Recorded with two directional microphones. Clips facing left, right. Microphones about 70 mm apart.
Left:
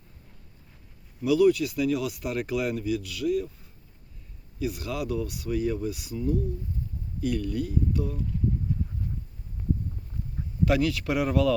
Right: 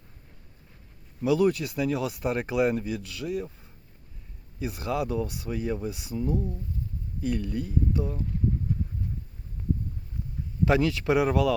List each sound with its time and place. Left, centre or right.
1.2 s speech: right
4.6 s speech: right
10.7 s speech: right